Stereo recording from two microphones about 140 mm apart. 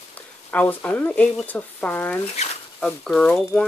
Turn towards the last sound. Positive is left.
turn(degrees=5)  # may be behind; listen again after turning